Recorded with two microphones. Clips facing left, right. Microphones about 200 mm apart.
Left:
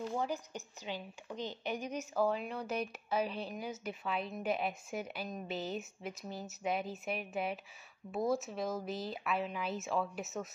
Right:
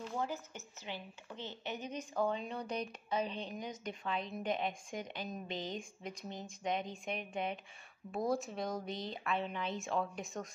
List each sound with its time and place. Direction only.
0.0 s a woman's voice: 15° left (ahead or behind)